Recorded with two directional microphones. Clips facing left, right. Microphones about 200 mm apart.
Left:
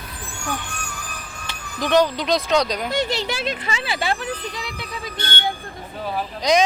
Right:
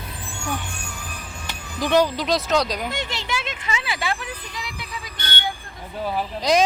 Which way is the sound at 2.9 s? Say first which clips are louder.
Left 5 dB; 40° left (ahead or behind).